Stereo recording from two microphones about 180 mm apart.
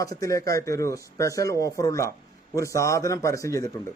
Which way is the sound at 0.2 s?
20° left (ahead or behind).